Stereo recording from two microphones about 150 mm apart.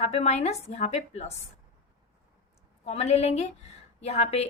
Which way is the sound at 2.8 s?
45° left (ahead or behind).